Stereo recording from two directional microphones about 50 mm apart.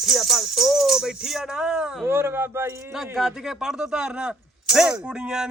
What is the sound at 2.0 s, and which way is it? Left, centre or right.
Speech, right.